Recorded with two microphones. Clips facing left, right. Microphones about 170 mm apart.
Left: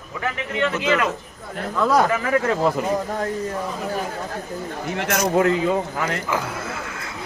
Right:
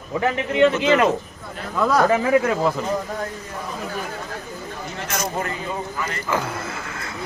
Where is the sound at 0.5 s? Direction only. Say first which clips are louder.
Right 5 dB; 25° right (ahead or behind).